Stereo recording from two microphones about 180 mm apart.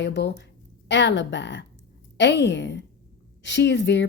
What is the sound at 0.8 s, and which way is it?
Speech, 80° left.